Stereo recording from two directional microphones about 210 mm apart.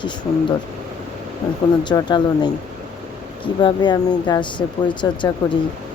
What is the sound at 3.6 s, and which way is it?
Speech, 20° left (ahead or behind).